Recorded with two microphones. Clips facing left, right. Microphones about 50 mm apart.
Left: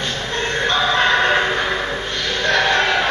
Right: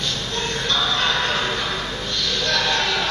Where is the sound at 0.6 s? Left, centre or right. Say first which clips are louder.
Left 5 dB; left.